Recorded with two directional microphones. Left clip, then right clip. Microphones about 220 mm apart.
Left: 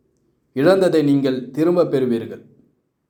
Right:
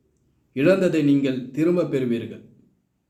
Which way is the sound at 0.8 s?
15° right (ahead or behind).